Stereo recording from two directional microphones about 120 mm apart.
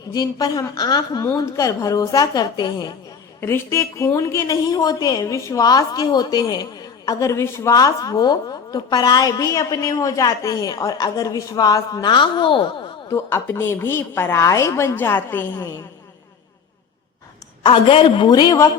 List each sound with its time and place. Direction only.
0.1 s a woman's voice: 30° left (ahead or behind)
3.4 s a woman's voice: 20° left (ahead or behind); by 12.6 s 45° left (ahead or behind)
13.1 s a woman's voice: 20° left (ahead or behind)
17.6 s a woman's voice: 45° left (ahead or behind)
18.3 s a woman's voice: 35° left (ahead or behind)